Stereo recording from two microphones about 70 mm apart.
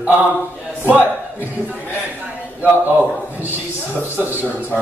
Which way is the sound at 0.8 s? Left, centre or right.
Right.